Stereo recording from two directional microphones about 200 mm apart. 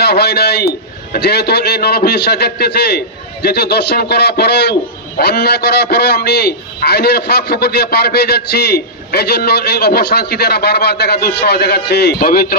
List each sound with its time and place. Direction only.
0.0 s a man's voice: 55° left (ahead or behind)